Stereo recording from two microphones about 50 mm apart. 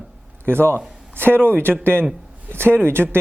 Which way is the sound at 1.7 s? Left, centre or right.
Right.